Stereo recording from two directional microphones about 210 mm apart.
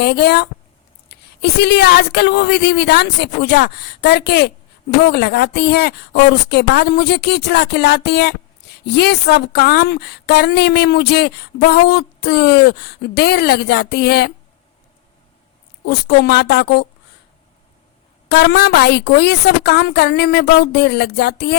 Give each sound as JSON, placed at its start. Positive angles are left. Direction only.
{"t": 0.0, "sound": "speech", "side_deg": 50}
{"t": 15.9, "sound": "speech", "side_deg": 50}
{"t": 18.3, "sound": "speech", "side_deg": 50}